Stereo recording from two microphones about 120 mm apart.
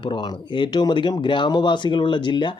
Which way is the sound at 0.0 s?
40° left (ahead or behind).